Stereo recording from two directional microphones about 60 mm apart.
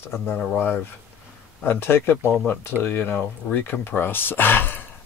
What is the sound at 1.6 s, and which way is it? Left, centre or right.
Speech, left.